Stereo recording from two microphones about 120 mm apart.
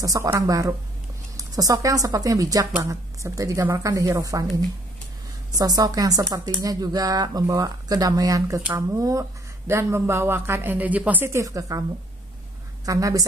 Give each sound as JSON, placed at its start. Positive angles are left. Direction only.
{"t": 0.0, "sound": "speech", "side_deg": -25}
{"t": 5.6, "sound": "speech", "side_deg": -30}
{"t": 12.8, "sound": "speech", "side_deg": -30}